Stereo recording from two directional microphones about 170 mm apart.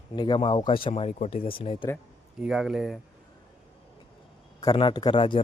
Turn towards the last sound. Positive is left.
turn(degrees=30)  # may be behind; listen again after turning